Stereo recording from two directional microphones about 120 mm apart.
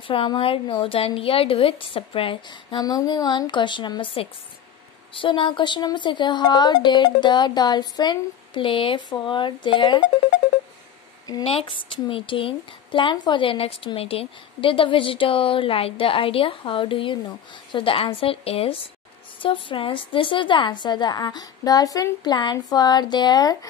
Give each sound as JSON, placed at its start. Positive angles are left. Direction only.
{"t": 0.0, "sound": "a woman's voice", "side_deg": 45}
{"t": 2.8, "sound": "a woman's voice", "side_deg": 35}
{"t": 11.4, "sound": "a woman's voice", "side_deg": 50}